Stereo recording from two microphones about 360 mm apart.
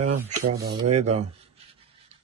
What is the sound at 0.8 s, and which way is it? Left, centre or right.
Speech, centre.